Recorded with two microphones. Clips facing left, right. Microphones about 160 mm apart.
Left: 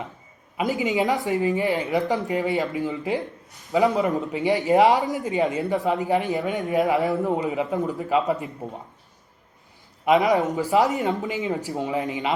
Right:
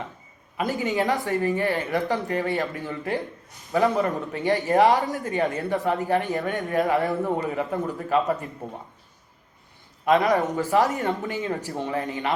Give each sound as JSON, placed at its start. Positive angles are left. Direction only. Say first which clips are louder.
{"t": 0.5, "sound": "speech", "louder": "left 2 dB", "side_deg": 15}
{"t": 10.1, "sound": "speech", "louder": "left 1 dB", "side_deg": 20}